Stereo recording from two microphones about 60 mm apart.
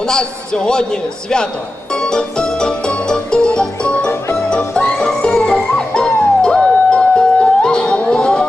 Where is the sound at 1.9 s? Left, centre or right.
Centre.